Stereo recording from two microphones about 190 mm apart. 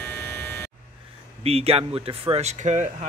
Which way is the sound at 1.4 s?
30° right (ahead or behind).